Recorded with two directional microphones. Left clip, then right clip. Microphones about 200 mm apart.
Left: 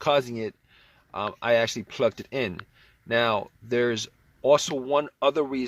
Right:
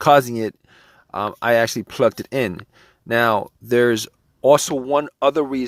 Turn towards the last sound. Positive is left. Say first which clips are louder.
# right 6 dB
turn(degrees=-50)  # may be behind; listen again after turning